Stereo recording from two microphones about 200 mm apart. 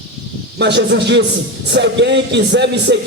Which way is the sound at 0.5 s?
60° right (ahead or behind).